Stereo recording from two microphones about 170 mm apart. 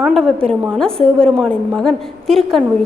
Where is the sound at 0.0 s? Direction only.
Centre (ahead or behind).